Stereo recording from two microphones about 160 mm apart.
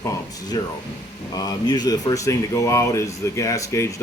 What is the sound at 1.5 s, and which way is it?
Speech, 25° left (ahead or behind).